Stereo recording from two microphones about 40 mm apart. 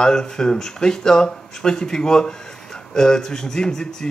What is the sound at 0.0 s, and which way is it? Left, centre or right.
Speech, centre.